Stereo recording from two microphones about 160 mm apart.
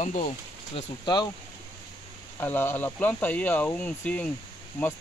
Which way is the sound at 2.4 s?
15° left (ahead or behind).